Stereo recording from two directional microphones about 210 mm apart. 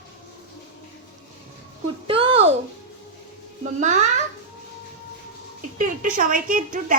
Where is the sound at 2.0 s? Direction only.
25° right (ahead or behind).